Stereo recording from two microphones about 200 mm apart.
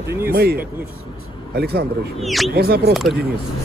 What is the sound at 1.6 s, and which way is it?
A man's voice, 50° right (ahead or behind).